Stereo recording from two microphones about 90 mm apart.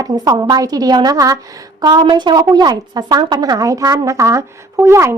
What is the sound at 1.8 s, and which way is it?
A woman's voice, 55° right (ahead or behind).